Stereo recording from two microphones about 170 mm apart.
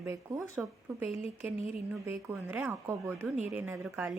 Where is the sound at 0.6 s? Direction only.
5° right (ahead or behind).